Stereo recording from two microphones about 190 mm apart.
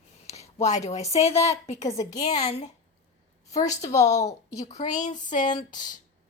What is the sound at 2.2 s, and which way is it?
Speech, 35° left (ahead or behind).